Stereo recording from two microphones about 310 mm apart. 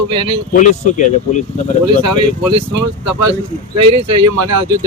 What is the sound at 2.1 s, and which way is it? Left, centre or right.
Speech, centre.